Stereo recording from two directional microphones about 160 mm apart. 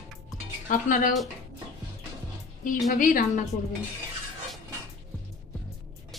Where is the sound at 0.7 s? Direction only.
55° left (ahead or behind).